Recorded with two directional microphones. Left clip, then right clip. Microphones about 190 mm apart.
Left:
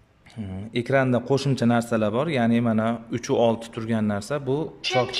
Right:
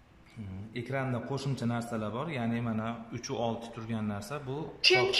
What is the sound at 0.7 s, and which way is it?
Speech, 55° left (ahead or behind).